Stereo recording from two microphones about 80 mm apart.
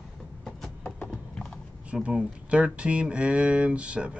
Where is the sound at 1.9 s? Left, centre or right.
Centre.